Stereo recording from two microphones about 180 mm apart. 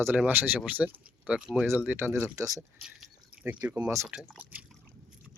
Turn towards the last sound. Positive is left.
turn(degrees=-10)  # may be behind; listen again after turning